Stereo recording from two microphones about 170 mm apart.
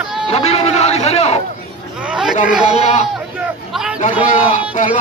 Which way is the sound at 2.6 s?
40° left (ahead or behind).